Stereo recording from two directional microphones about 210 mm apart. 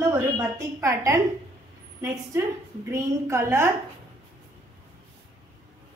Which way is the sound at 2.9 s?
10° right (ahead or behind).